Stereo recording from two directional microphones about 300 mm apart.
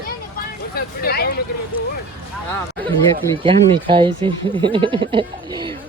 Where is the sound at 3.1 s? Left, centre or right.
Centre.